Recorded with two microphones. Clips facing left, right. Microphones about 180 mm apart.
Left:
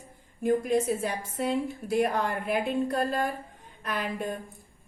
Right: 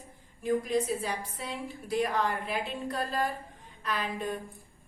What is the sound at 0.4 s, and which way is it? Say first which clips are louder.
A woman's voice: left 3 dB; 55° left (ahead or behind).